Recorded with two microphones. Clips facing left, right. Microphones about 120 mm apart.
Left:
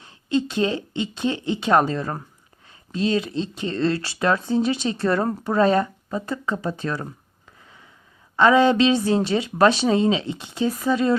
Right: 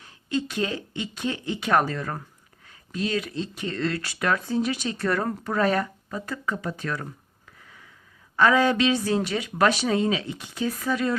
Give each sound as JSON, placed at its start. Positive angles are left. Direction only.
{"t": 0.0, "sound": "speech", "side_deg": 25}
{"t": 8.4, "sound": "speech", "side_deg": 25}